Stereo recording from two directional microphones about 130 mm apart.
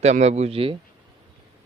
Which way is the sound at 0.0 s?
55° right (ahead or behind).